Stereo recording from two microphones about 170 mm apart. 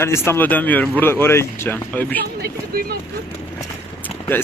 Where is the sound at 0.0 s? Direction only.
15° left (ahead or behind).